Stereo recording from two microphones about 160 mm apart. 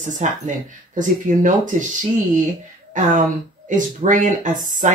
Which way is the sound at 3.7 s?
55° right (ahead or behind).